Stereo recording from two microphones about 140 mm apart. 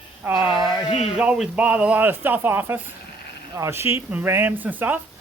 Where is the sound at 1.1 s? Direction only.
5° right (ahead or behind).